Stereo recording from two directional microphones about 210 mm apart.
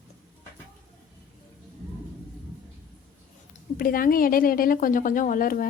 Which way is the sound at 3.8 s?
45° left (ahead or behind).